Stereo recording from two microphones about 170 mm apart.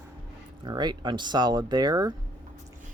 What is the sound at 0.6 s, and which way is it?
Speech, 25° right (ahead or behind).